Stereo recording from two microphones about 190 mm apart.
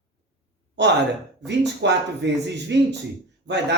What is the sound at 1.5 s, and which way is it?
Speech, 65° right (ahead or behind).